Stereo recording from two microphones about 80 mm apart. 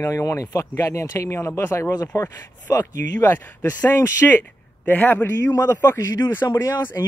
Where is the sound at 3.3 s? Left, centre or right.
Left.